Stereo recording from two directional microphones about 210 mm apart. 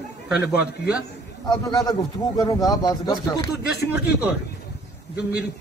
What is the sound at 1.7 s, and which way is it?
A man's voice, 15° left (ahead or behind).